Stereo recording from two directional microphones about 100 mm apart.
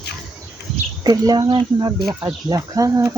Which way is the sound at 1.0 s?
40° right (ahead or behind).